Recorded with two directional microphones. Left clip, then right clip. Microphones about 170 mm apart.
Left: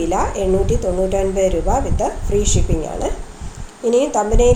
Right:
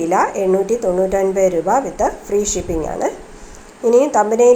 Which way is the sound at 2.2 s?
5° right (ahead or behind).